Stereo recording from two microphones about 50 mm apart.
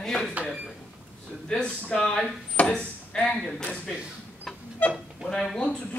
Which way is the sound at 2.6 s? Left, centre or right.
Left.